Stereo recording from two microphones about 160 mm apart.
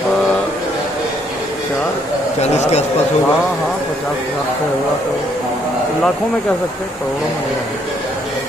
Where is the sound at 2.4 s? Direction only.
40° left (ahead or behind).